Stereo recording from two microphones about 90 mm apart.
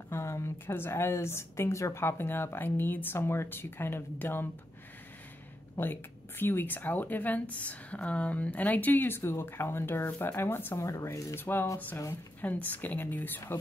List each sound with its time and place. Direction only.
0.1 s speech: 30° left (ahead or behind)
5.8 s speech: 25° left (ahead or behind)
10.8 s speech: 35° left (ahead or behind)